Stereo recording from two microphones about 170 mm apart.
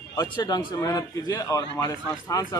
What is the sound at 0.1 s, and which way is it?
A man's voice, 25° left (ahead or behind).